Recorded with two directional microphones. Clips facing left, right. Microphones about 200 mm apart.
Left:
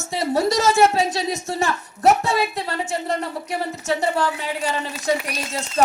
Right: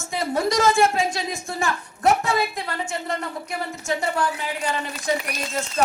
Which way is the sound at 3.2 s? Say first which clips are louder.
Left 3 dB; 35° left (ahead or behind).